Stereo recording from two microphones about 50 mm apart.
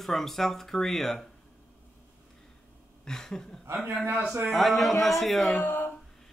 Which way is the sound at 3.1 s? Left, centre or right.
Centre.